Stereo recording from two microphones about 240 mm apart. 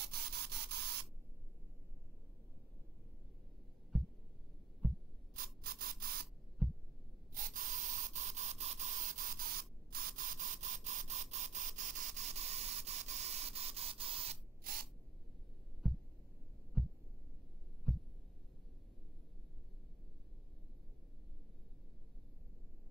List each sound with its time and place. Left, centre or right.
0.0 s rub: right
5.3 s mechanisms: right
7.3 s sanding: right
14.7 s spray: right
16.8 s heart sounds: centre